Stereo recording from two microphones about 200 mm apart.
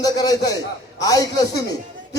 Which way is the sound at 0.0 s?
20° left (ahead or behind).